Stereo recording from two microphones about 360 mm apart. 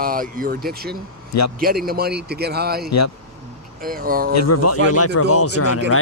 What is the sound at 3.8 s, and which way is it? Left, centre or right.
Speech, right.